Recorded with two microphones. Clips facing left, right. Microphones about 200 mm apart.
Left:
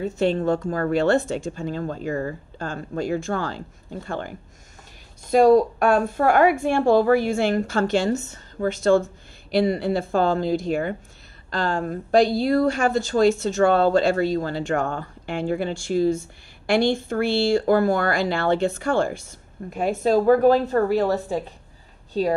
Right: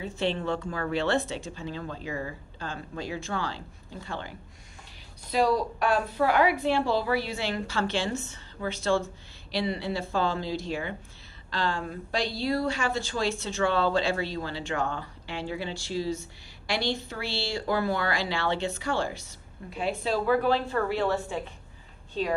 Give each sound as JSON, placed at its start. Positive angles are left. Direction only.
{"t": 0.0, "sound": "a woman's voice", "side_deg": 45}